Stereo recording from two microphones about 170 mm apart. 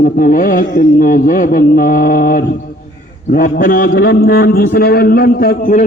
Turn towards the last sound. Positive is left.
turn(degrees=50)  # may be behind; listen again after turning